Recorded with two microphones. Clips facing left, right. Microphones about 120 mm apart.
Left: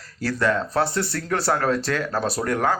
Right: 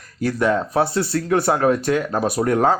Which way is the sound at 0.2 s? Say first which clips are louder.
Right 3 dB; 15° right (ahead or behind).